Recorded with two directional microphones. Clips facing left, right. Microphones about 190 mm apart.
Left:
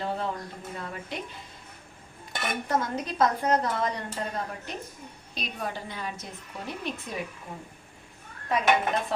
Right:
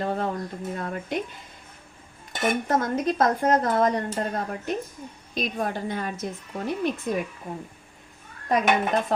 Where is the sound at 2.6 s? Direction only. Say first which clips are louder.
Right 5 dB; 50° right (ahead or behind).